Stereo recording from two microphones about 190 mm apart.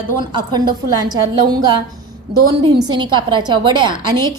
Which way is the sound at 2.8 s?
25° right (ahead or behind).